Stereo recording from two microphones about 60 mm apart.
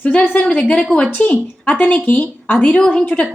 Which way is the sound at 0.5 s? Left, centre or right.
Centre.